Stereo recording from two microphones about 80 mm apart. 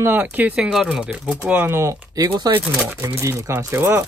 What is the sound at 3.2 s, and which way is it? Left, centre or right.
Speech, right.